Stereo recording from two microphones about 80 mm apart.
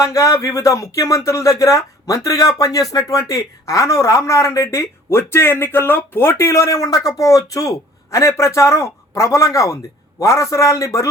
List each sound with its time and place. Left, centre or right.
0.0 s a man's voice: left